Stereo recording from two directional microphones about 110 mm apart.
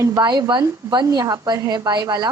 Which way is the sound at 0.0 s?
35° right (ahead or behind).